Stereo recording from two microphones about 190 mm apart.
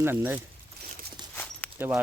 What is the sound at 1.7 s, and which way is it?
Speech, 10° right (ahead or behind).